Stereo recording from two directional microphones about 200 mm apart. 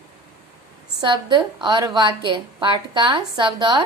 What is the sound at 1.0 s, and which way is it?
A woman's voice, 25° right (ahead or behind).